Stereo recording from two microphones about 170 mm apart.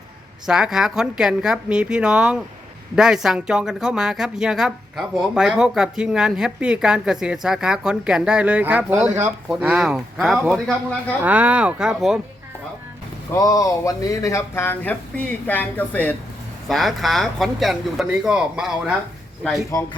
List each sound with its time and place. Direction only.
0.4 s a woman's voice: 5° right (ahead or behind)
13.3 s a woman's voice: 20° left (ahead or behind); by 18.9 s 5° right (ahead or behind)